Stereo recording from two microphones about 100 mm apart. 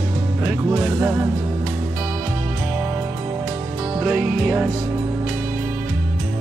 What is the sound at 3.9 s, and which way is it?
Music, 15° right (ahead or behind).